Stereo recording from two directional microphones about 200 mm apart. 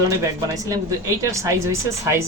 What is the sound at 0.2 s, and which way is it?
Speech, 15° right (ahead or behind).